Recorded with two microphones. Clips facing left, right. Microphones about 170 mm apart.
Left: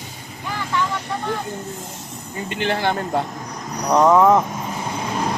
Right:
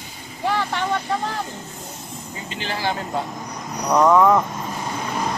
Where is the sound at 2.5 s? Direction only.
60° left (ahead or behind).